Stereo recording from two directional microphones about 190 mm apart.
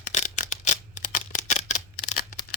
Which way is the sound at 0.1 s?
40° left (ahead or behind).